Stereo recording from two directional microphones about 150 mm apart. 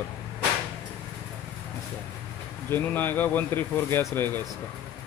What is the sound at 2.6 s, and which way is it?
Speech, 15° left (ahead or behind).